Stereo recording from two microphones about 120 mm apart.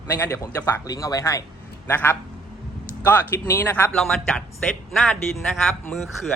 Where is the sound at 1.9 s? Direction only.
15° left (ahead or behind).